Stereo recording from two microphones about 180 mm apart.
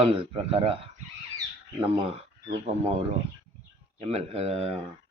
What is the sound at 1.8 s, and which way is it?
Speech, 30° right (ahead or behind).